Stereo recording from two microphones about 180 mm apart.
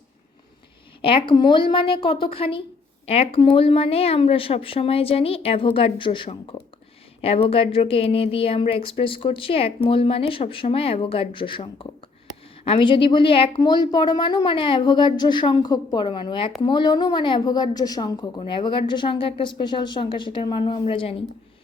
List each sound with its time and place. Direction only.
1.0 s a woman's voice: 30° left (ahead or behind)